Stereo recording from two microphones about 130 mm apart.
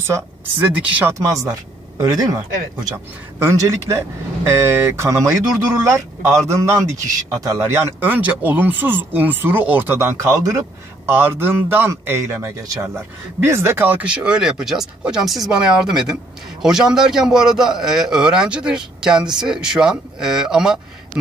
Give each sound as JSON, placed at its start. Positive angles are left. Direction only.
{"t": 0.0, "sound": "a man's voice", "side_deg": -15}
{"t": 1.2, "sound": "a man's voice", "side_deg": -25}